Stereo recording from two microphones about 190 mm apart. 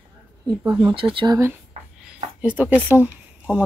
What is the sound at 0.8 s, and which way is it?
Speech, 30° right (ahead or behind).